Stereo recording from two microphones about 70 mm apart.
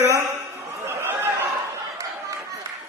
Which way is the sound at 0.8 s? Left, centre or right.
Right.